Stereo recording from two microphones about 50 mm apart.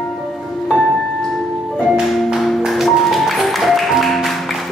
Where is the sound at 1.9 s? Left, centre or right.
Centre.